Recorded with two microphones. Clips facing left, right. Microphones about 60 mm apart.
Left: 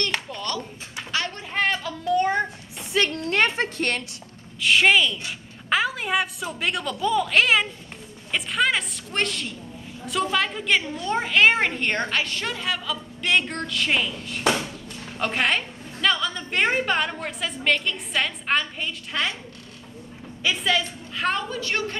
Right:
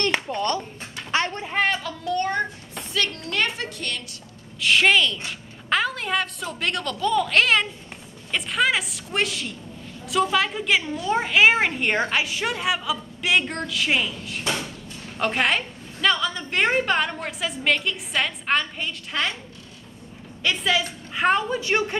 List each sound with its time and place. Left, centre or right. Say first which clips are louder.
0.3 s speech: right 5 dB; right
1.1 s a sound: right 4 dB; right
1.4 s child singing: right 1 dB; centre
2.9 s a woman's voice: left 4 dB; left
4.6 s a woman's voice: even; centre
20.4 s a woman's voice: even; centre
21.1 s a woman's voice: right 5 dB; right